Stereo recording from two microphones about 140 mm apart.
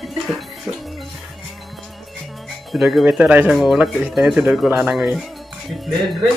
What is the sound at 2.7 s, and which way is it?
Speech, 5° right (ahead or behind).